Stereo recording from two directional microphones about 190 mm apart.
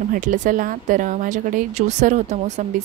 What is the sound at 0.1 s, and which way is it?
Speech, 45° right (ahead or behind).